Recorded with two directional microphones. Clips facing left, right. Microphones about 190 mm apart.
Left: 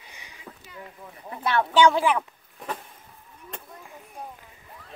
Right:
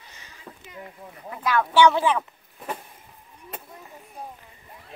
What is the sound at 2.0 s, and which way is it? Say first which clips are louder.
Speech: even; 10° left (ahead or behind).